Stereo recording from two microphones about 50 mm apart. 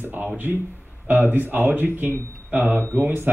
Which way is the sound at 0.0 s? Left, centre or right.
Right.